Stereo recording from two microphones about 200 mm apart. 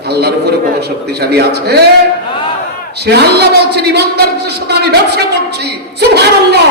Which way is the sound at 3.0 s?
55° right (ahead or behind).